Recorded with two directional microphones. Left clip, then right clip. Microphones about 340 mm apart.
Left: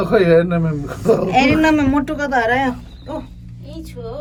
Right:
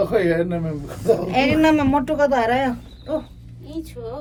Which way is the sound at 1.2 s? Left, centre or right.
Centre.